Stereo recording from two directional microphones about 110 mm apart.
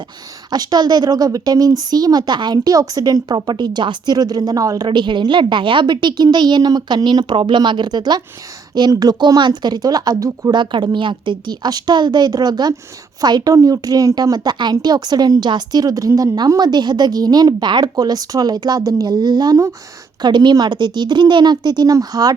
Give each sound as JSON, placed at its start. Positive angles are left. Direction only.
{"t": 0.5, "sound": "a woman's voice", "side_deg": -35}
{"t": 4.9, "sound": "a woman's voice", "side_deg": -45}
{"t": 10.5, "sound": "a woman's voice", "side_deg": -45}